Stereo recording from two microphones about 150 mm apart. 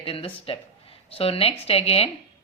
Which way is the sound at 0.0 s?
40° left (ahead or behind).